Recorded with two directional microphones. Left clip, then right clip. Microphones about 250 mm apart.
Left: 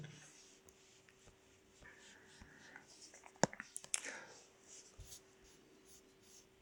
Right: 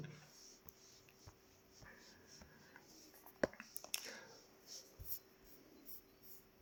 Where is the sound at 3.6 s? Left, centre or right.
Left.